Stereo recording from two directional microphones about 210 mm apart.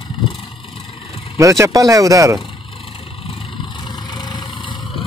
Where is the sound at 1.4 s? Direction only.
15° right (ahead or behind).